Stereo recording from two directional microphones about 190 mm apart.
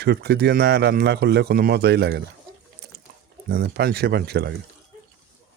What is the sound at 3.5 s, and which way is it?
Speech, 55° right (ahead or behind).